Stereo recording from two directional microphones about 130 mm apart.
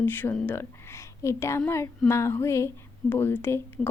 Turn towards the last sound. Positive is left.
turn(degrees=20)  # may be behind; listen again after turning